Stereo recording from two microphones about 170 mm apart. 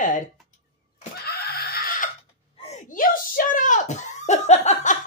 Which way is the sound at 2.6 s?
45° left (ahead or behind).